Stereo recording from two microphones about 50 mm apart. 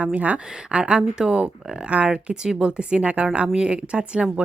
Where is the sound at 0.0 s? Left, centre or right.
Right.